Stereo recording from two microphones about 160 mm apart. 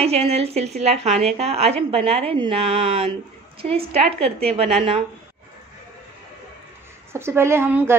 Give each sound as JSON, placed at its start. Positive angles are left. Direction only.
{"t": 0.0, "sound": "a woman's voice", "side_deg": -40}
{"t": 1.0, "sound": "speech", "side_deg": 0}
{"t": 1.4, "sound": "a woman's voice", "side_deg": -40}
{"t": 7.1, "sound": "a woman's voice", "side_deg": -15}